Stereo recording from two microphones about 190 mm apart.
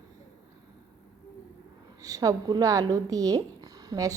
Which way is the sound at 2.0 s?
20° right (ahead or behind).